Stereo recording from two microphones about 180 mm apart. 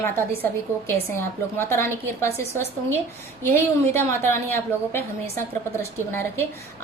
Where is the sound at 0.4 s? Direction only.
15° left (ahead or behind).